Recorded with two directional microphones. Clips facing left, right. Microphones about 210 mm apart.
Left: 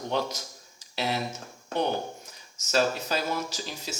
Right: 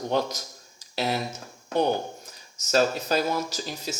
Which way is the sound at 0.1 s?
45° right (ahead or behind).